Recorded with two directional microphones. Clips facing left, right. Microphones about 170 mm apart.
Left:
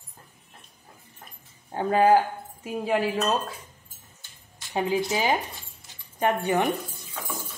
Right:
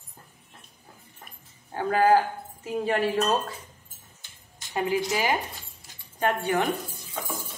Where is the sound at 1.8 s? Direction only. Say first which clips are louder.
Left 1 dB; 20° left (ahead or behind).